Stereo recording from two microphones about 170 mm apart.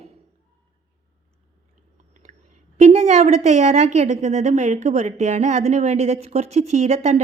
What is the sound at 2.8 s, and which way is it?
A woman's voice, 40° right (ahead or behind).